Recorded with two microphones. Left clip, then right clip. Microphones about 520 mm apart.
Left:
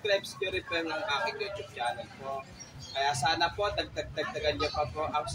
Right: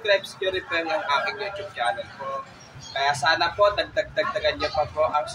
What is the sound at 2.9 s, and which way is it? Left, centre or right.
Speech, left.